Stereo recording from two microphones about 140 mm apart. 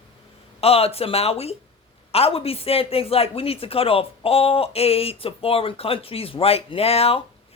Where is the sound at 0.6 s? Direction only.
45° left (ahead or behind).